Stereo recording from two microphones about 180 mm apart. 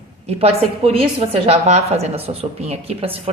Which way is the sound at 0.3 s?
35° right (ahead or behind).